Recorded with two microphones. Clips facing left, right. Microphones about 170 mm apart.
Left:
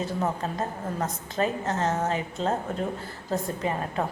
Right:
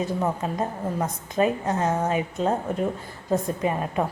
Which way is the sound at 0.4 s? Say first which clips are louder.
Right 3 dB; 15° right (ahead or behind).